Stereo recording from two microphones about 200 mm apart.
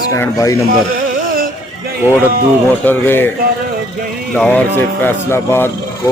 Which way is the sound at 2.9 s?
10° left (ahead or behind).